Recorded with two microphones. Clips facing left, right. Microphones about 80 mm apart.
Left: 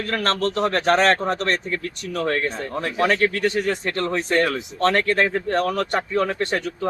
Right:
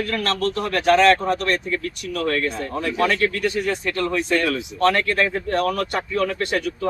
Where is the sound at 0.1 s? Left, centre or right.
Left.